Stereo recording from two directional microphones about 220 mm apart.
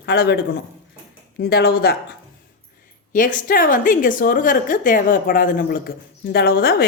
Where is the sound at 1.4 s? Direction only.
45° left (ahead or behind).